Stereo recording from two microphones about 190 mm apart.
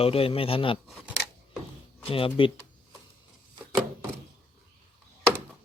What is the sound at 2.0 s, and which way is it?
Speech, 30° left (ahead or behind).